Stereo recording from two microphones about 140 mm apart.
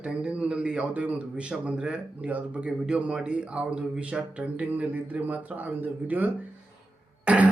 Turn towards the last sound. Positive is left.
turn(degrees=-10)  # may be behind; listen again after turning